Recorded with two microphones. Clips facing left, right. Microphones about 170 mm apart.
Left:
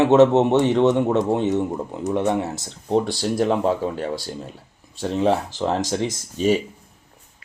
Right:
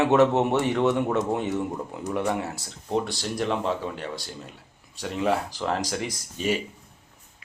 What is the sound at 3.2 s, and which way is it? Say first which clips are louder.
Speech: left 7 dB; 40° left (ahead or behind).